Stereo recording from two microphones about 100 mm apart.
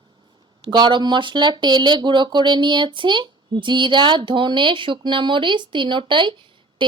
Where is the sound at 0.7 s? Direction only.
50° right (ahead or behind).